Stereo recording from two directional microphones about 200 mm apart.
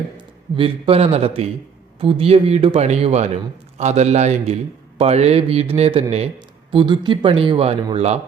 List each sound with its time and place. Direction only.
0.5 s speech: 30° right (ahead or behind)